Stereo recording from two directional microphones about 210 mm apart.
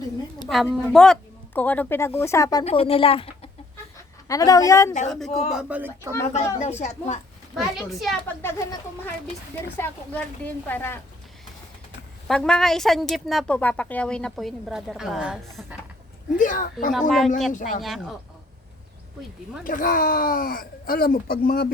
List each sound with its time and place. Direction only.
0.4 s speech: centre (ahead or behind); by 2.6 s 15° left (ahead or behind)
2.6 s speech: 25° left (ahead or behind)
4.3 s speech: 15° left (ahead or behind)
5.0 s a woman's voice: centre (ahead or behind)
6.3 s a woman's voice: 30° left (ahead or behind)
7.5 s a woman's voice: centre (ahead or behind)
8.4 s speech: 10° left (ahead or behind)
12.3 s a woman's voice: 5° left (ahead or behind)
16.4 s a woman's voice: 40° left (ahead or behind)
16.9 s a woman's voice: centre (ahead or behind)
17.5 s a woman's voice: 40° left (ahead or behind)
17.8 s a woman's voice: centre (ahead or behind)
19.6 s speech: 40° left (ahead or behind)